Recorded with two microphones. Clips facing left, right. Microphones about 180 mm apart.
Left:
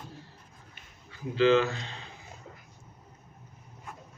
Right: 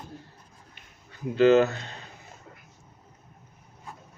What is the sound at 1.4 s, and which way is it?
Speech, 45° right (ahead or behind).